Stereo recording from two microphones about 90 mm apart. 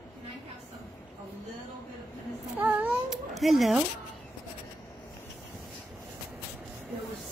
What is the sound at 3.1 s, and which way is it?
Cat, centre (ahead or behind).